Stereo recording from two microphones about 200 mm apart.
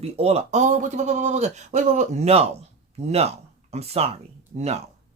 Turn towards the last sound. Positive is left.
turn(degrees=-30)  # may be behind; listen again after turning